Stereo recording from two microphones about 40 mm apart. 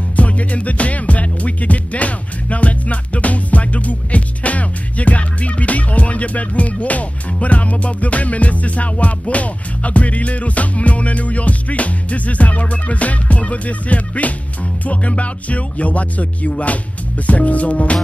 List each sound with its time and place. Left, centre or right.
0.1 s music: left